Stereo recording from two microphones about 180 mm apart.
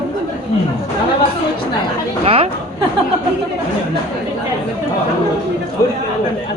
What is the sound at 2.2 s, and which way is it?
Speech, 30° right (ahead or behind).